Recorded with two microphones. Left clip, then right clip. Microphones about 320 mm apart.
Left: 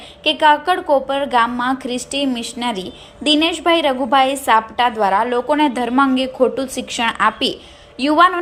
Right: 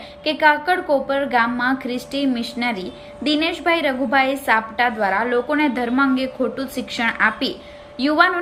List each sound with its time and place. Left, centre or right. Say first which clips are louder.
0.3 s a woman's voice: left 3 dB; centre